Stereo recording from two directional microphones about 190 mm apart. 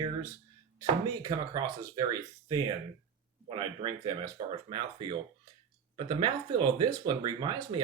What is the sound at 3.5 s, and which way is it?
Speech, 25° right (ahead or behind).